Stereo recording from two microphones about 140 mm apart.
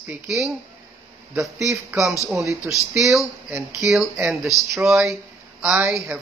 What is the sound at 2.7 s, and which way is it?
Speech, centre (ahead or behind).